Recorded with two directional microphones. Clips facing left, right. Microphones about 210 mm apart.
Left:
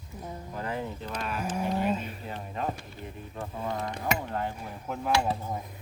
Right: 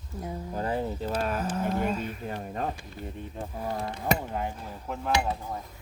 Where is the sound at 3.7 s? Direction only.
30° right (ahead or behind).